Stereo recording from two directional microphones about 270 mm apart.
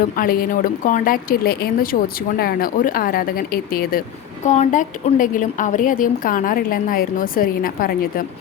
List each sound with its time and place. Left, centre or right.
0.2 s a woman's voice: left